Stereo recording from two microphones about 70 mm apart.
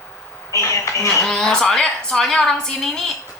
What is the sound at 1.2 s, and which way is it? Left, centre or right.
A woman's voice, centre.